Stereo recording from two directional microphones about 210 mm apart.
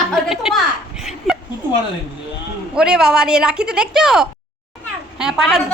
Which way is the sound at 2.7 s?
5° right (ahead or behind).